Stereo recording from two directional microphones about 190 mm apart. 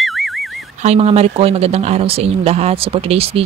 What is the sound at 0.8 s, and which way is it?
Speech, 35° right (ahead or behind).